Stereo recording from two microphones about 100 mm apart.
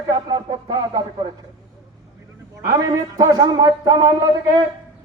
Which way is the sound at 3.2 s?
45° right (ahead or behind).